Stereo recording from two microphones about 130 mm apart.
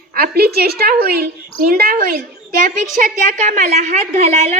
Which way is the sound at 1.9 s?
90° right.